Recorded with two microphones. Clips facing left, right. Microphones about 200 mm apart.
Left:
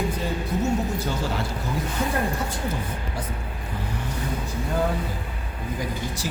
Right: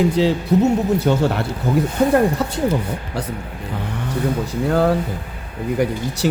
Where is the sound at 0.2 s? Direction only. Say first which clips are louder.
Right 11 dB; 75° right (ahead or behind).